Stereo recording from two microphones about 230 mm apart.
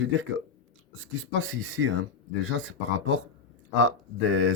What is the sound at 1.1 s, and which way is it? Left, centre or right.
Speech, right.